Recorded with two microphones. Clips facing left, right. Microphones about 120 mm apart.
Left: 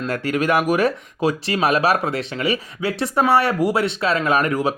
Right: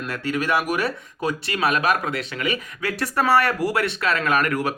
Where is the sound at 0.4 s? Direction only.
40° left (ahead or behind).